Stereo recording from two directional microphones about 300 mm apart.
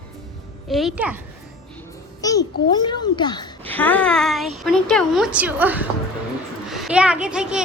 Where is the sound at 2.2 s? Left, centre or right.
Centre.